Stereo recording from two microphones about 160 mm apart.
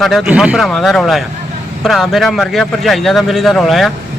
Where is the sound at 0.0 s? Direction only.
Centre (ahead or behind).